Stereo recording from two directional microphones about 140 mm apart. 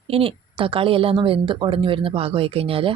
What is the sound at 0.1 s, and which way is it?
A woman's voice, 40° right (ahead or behind).